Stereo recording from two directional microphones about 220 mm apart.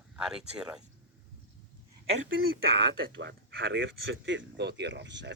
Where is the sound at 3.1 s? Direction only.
50° right (ahead or behind).